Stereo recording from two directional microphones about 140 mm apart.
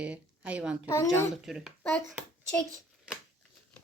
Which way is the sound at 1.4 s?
5° right (ahead or behind).